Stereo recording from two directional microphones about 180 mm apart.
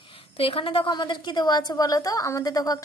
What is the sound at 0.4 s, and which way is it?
A woman's voice, 30° left (ahead or behind).